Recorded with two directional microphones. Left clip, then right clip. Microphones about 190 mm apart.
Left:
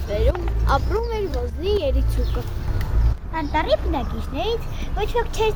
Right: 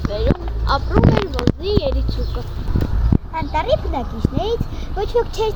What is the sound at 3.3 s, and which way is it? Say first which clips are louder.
Speech: right 1 dB; 45° right (ahead or behind).